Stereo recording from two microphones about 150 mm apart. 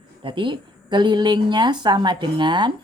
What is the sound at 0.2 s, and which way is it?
Speech, 35° right (ahead or behind).